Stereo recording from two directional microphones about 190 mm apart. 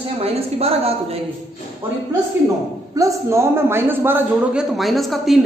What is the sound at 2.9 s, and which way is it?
A man's voice, 15° right (ahead or behind).